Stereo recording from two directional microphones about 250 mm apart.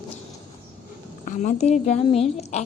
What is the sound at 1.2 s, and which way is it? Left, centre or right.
A woman's voice, left.